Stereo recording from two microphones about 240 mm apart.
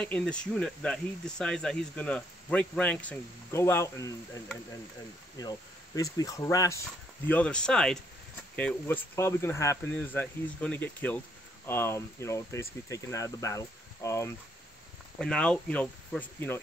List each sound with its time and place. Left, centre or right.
0.0 s speech: centre
5.4 s speech: centre